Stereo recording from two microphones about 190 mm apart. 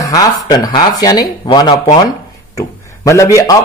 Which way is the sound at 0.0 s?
20° left (ahead or behind).